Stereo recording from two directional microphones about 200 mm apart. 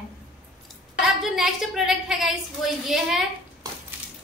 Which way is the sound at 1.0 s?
Centre (ahead or behind).